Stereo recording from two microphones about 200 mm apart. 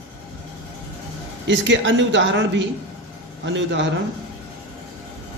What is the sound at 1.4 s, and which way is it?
A man's voice, 65° right (ahead or behind).